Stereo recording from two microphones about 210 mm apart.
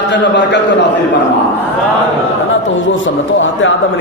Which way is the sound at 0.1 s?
55° left (ahead or behind).